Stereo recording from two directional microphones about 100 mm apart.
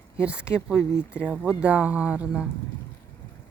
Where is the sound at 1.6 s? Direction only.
15° right (ahead or behind).